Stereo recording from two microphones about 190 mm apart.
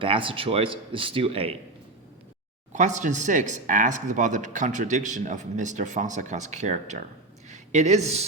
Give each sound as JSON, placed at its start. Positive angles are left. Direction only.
{"t": 0.0, "sound": "speech", "side_deg": -30}
{"t": 2.7, "sound": "speech", "side_deg": -40}